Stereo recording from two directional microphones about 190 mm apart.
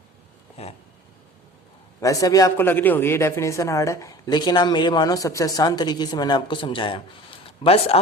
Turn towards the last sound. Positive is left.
turn(degrees=30)  # may be behind; listen again after turning